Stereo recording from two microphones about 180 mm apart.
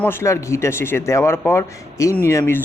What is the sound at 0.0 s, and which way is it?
A man's voice, 15° left (ahead or behind).